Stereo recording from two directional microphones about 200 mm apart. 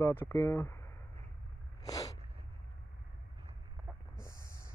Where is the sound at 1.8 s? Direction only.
15° left (ahead or behind).